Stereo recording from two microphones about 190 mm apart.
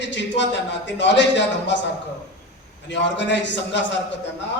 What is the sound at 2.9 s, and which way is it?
Speech, 70° left (ahead or behind).